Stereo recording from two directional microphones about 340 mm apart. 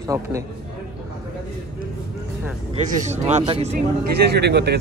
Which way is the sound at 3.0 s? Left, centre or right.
Centre.